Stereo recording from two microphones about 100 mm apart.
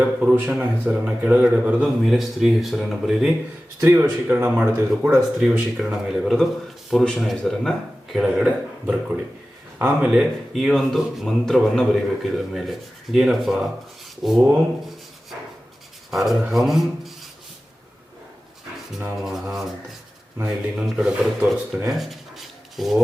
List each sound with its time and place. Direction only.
0.0 s a man's voice: 10° right (ahead or behind)
3.8 s speech: 20° right (ahead or behind)
5.5 s a man's voice: 10° right (ahead or behind)
8.4 s speech: 10° right (ahead or behind)
10.1 s a man's voice: 5° right (ahead or behind)
14.8 s writing: centre (ahead or behind)
16.1 s a man's voice: centre (ahead or behind)
19.1 s a man's voice: 5° right (ahead or behind)
20.7 s speech: 5° right (ahead or behind)
21.8 s writing: centre (ahead or behind)